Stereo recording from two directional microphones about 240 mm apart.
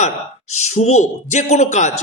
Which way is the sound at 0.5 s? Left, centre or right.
Left.